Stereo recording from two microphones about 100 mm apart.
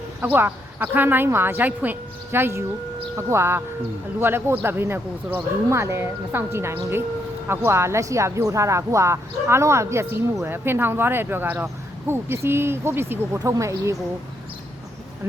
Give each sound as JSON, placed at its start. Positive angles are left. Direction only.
{"t": 0.2, "sound": "speech", "side_deg": -20}